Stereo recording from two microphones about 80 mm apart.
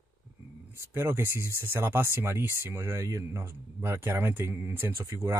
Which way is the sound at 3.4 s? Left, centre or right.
Right.